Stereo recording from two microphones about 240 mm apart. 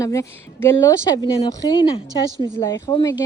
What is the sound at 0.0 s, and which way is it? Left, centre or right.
Speech, centre.